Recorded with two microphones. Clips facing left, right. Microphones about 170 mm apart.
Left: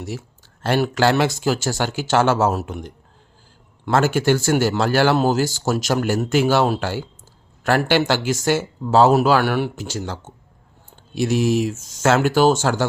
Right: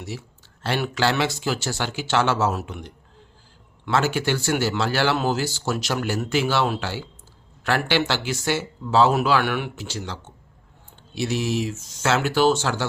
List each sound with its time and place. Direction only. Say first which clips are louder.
0.0 s speech: left 4 dB; 45° left (ahead or behind)